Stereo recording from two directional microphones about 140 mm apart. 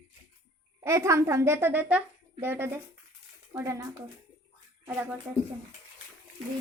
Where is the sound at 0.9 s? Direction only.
20° right (ahead or behind).